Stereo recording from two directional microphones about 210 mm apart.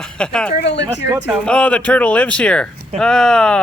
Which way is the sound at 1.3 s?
5° left (ahead or behind).